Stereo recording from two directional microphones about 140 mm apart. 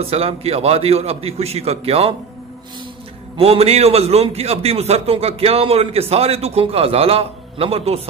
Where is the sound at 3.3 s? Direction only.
45° right (ahead or behind).